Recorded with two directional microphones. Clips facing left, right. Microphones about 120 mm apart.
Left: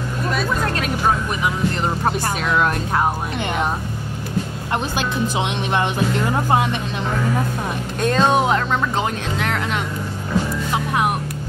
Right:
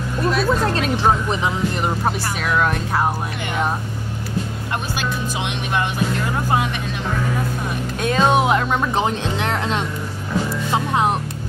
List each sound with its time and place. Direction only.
0.7 s speech: 25° right (ahead or behind)
2.5 s speech: 5° left (ahead or behind)
8.0 s speech: 5° right (ahead or behind)
8.7 s speech: 20° right (ahead or behind)